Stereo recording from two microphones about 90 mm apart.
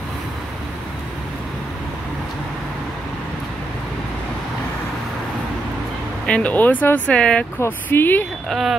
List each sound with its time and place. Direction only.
6.2 s speech: 15° left (ahead or behind)
7.6 s speech: 25° left (ahead or behind)
8.5 s speech: centre (ahead or behind)